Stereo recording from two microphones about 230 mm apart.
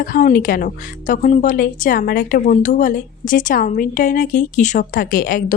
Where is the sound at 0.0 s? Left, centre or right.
Left.